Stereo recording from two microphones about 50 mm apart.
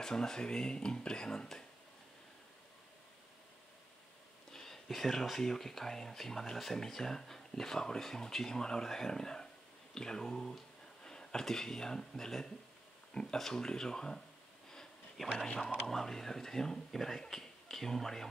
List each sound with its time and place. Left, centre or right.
0.0 s speech: centre
4.5 s speech: centre
14.7 s a sound: centre
15.3 s speech: centre
15.9 s speech: centre